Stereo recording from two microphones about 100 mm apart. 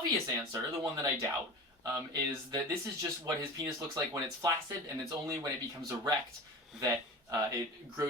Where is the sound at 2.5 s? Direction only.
40° right (ahead or behind).